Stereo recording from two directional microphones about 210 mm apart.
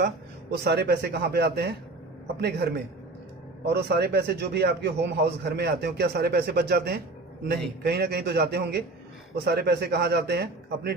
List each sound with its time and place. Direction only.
0.6 s a man's voice: 50° right (ahead or behind)